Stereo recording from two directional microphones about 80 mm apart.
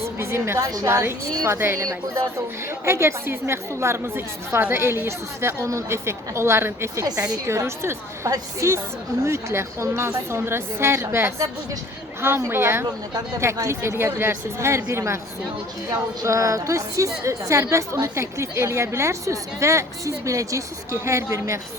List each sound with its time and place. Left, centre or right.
0.2 s a woman's voice: right
2.8 s a woman's voice: right
12.8 s speech: right
13.4 s a woman's voice: right